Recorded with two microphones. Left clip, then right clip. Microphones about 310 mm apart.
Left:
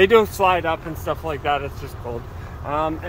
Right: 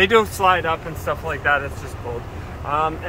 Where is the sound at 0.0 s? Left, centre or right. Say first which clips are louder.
Left 1 dB; left.